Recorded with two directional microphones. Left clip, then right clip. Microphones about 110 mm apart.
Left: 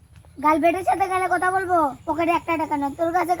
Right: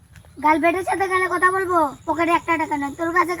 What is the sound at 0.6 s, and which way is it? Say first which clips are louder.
Speech: even; 15° left (ahead or behind).